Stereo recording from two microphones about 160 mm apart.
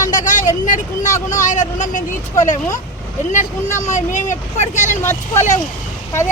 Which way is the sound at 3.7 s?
50° left (ahead or behind).